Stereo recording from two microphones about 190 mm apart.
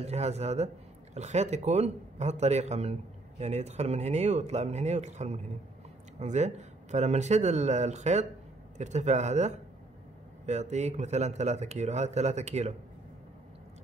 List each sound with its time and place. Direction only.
0.0 s a man's voice: 35° right (ahead or behind)